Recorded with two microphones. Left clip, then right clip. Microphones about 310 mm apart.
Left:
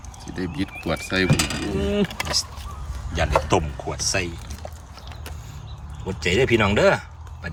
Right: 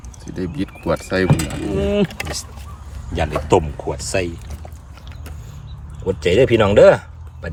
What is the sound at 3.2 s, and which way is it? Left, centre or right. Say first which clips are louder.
Speech: right 4 dB; centre.